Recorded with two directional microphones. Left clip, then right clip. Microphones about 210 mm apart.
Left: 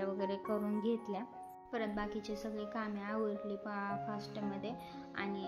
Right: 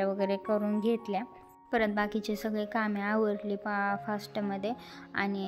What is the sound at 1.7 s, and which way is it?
A woman's voice, 40° right (ahead or behind).